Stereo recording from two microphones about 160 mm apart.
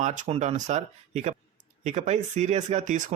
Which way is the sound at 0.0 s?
50° right (ahead or behind).